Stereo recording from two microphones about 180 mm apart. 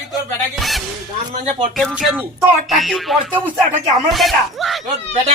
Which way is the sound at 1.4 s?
30° right (ahead or behind).